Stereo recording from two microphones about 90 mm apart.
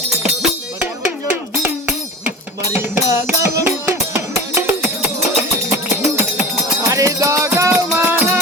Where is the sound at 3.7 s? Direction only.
20° right (ahead or behind).